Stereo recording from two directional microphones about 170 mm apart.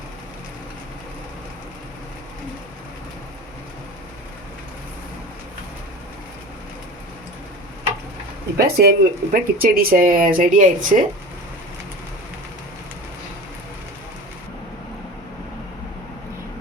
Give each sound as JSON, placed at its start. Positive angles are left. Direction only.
{"t": 8.5, "sound": "speech", "side_deg": -65}